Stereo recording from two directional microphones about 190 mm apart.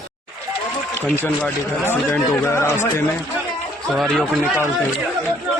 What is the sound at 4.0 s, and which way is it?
Speech, centre (ahead or behind).